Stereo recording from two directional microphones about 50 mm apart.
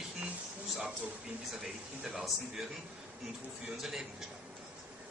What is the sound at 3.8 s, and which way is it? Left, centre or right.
Speech, centre.